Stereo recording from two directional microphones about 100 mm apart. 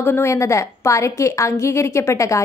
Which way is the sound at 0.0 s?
25° left (ahead or behind).